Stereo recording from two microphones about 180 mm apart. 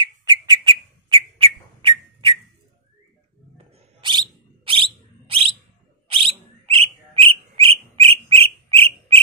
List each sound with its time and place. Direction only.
0.0 s bird: 20° right (ahead or behind)
3.5 s bird: 30° right (ahead or behind)
6.1 s bird: 30° right (ahead or behind)